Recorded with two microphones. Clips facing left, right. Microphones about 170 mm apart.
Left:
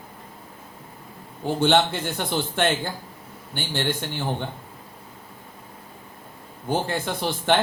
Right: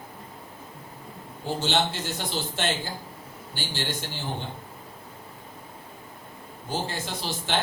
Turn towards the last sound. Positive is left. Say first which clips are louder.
# left 8 dB
turn(degrees=55)  # may be behind; listen again after turning